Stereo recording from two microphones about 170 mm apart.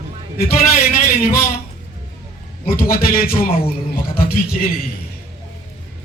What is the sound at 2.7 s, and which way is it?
Speech, 60° left (ahead or behind).